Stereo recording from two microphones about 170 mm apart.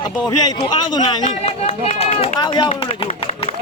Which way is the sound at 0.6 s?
25° left (ahead or behind).